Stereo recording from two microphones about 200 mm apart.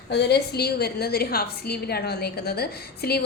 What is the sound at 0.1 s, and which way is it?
A woman's voice, 55° left (ahead or behind).